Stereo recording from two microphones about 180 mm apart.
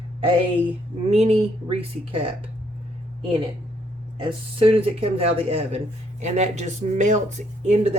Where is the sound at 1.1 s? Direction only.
35° right (ahead or behind).